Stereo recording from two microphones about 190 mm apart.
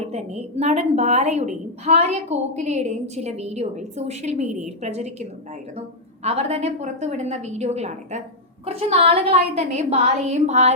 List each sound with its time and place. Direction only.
0.0 s a woman's voice: 35° right (ahead or behind)
6.2 s a woman's voice: 35° right (ahead or behind)